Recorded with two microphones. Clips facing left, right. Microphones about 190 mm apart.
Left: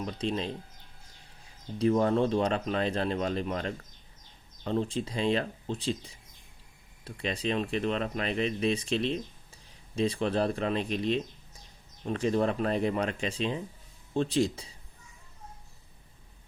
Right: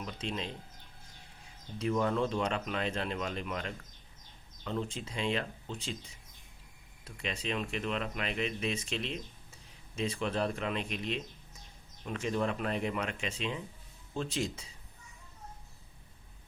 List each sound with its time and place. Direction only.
0.0 s speech: 35° left (ahead or behind)
1.8 s speech: 35° left (ahead or behind)
7.0 s speech: 35° left (ahead or behind)